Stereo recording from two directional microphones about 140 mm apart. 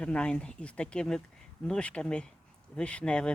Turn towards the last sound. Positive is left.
turn(degrees=5)  # may be behind; listen again after turning